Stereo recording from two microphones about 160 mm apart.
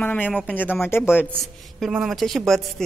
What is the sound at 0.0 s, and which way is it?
Speech, 10° left (ahead or behind).